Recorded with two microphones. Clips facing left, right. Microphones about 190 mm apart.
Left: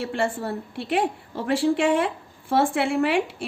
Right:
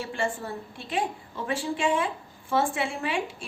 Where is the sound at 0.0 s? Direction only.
65° left (ahead or behind).